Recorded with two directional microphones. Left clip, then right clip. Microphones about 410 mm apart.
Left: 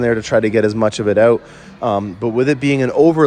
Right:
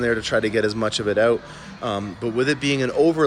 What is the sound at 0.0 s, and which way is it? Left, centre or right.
A man's voice, centre.